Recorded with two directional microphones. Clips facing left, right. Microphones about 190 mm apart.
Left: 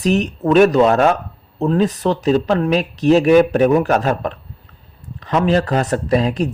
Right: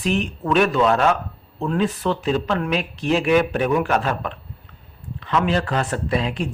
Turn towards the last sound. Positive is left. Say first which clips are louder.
# left 6 dB
turn(degrees=40)  # may be behind; listen again after turning